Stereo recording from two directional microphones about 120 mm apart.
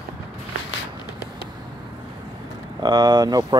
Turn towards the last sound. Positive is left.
turn(degrees=-35)  # may be behind; listen again after turning